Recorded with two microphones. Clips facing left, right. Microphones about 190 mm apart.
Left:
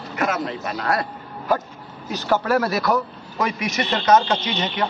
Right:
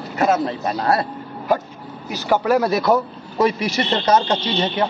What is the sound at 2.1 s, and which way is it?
A man's voice, 15° right (ahead or behind).